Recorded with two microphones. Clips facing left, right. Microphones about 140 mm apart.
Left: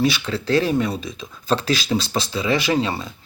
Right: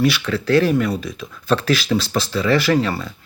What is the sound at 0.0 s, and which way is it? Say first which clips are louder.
Speech: right 2 dB; 25° left (ahead or behind).